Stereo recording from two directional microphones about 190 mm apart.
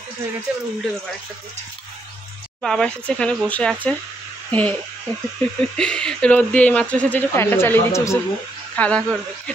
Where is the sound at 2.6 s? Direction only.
5° left (ahead or behind).